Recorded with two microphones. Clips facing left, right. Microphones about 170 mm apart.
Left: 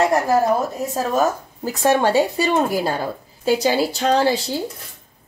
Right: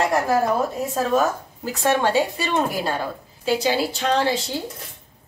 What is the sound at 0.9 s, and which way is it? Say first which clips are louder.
Speech: left 1 dB; 40° left (ahead or behind).